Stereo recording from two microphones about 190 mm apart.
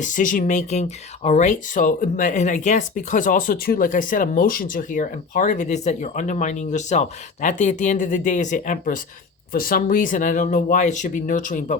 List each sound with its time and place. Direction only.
0.0 s speech: 40° left (ahead or behind)